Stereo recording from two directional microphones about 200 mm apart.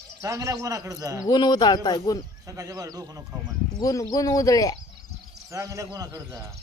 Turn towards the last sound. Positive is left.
turn(degrees=-20)  # may be behind; listen again after turning